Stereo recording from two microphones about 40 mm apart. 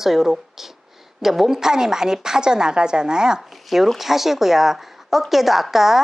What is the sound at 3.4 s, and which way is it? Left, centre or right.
A woman's voice, centre.